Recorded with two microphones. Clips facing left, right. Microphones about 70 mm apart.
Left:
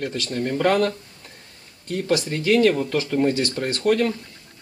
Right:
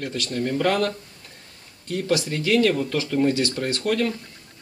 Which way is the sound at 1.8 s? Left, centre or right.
Centre.